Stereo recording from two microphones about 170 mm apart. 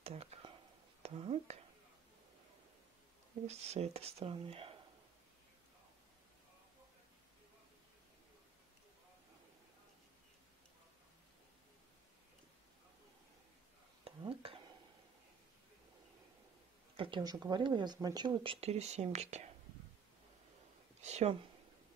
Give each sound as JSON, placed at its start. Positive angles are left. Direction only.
{"t": 0.0, "sound": "a sound", "side_deg": -35}
{"t": 1.0, "sound": "speech", "side_deg": -35}
{"t": 3.4, "sound": "speech", "side_deg": -40}
{"t": 14.0, "sound": "whispering", "side_deg": -30}
{"t": 16.9, "sound": "speech", "side_deg": -30}
{"t": 21.0, "sound": "a sound", "side_deg": -40}